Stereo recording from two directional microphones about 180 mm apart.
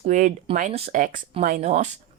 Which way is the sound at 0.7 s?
35° right (ahead or behind).